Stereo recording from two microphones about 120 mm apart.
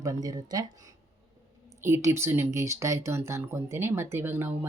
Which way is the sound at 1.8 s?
20° right (ahead or behind).